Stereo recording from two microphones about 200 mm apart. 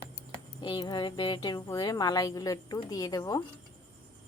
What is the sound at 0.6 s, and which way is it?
A woman's voice, 20° left (ahead or behind).